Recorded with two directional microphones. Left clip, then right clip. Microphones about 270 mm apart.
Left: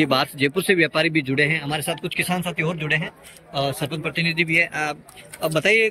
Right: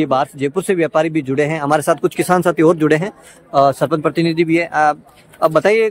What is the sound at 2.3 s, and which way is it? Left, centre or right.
Speech, right.